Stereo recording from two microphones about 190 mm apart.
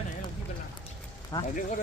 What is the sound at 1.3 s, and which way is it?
Speech, 20° left (ahead or behind).